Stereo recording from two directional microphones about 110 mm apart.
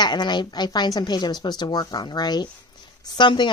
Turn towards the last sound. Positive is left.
turn(degrees=45)  # may be behind; listen again after turning